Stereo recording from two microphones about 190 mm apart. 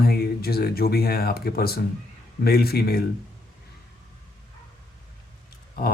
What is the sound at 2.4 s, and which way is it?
Mantra, 55° left (ahead or behind).